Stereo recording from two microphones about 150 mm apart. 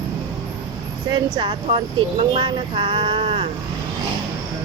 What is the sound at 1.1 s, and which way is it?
Speech, 35° right (ahead or behind).